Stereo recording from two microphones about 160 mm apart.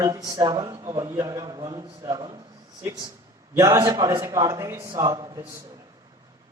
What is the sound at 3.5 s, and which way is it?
A man's voice, 20° right (ahead or behind).